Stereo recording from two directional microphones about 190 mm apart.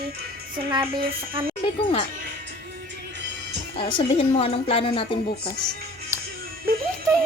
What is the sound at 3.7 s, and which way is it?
A woman's voice, 30° left (ahead or behind).